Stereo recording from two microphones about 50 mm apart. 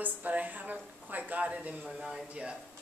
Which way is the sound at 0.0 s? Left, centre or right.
Right.